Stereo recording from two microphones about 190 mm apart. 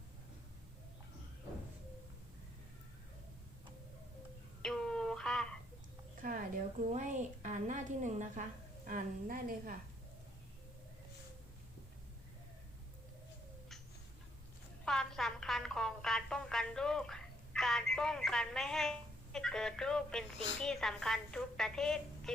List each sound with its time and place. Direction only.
4.6 s a sound: 5° left (ahead or behind)
6.2 s a woman's voice: 45° right (ahead or behind)
14.8 s music: centre (ahead or behind)